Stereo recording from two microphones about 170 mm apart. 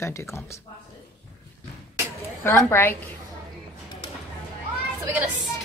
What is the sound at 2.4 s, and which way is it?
Speech, 15° left (ahead or behind).